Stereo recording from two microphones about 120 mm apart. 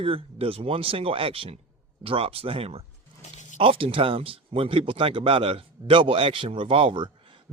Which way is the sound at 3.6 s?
50° right (ahead or behind).